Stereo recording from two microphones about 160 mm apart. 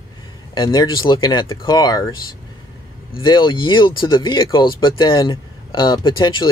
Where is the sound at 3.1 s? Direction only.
30° left (ahead or behind).